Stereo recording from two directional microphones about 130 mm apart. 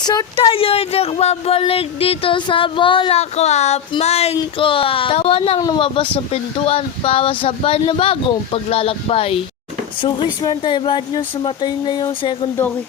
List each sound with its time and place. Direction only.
0.0 s speech: 30° left (ahead or behind)
0.4 s speech: 45° left (ahead or behind)
4.4 s speech: 40° left (ahead or behind)
5.5 s speech: 30° left (ahead or behind); by 9.4 s 50° left (ahead or behind)
10.4 s speech: 35° left (ahead or behind)